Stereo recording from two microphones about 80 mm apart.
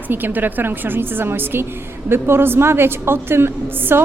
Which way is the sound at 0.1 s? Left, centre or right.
Right.